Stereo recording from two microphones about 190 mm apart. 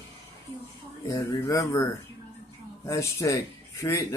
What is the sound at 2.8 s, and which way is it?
Speech, 15° left (ahead or behind).